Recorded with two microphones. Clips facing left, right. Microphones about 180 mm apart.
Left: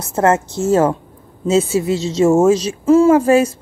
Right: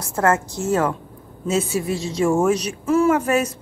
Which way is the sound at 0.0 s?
25° left (ahead or behind).